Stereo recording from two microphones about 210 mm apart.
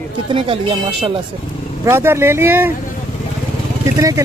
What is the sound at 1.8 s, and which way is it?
Speech, 10° right (ahead or behind).